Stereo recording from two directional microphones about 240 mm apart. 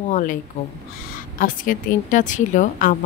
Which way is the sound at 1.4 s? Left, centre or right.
Left.